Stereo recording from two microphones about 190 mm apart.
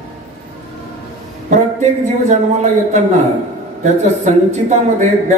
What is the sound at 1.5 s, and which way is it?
A man's voice, 35° right (ahead or behind).